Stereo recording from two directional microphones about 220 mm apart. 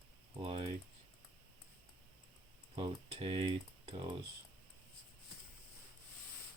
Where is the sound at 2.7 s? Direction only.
25° right (ahead or behind).